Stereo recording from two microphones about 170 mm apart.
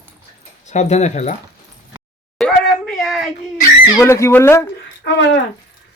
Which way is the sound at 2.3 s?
5° left (ahead or behind).